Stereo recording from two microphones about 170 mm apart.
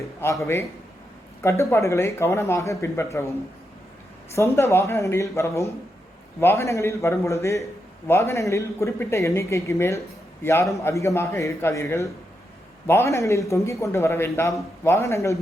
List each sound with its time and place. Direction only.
0.2 s a man's voice: 15° left (ahead or behind)
1.4 s a man's voice: 15° left (ahead or behind)
4.4 s a man's voice: 15° left (ahead or behind)